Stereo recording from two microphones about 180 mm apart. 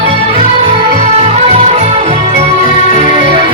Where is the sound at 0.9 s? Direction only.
40° right (ahead or behind).